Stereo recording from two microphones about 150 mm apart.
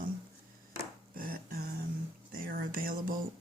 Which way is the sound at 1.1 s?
75° right (ahead or behind).